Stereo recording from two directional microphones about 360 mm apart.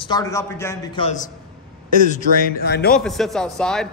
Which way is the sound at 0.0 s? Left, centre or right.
Centre.